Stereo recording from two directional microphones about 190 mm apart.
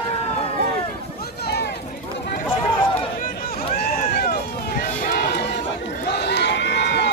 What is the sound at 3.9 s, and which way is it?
Run, 55° left (ahead or behind).